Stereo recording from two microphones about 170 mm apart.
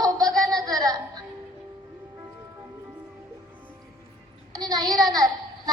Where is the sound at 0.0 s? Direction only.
20° right (ahead or behind).